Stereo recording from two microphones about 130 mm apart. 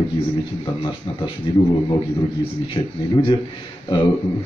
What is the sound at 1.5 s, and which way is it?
Speech, 35° left (ahead or behind).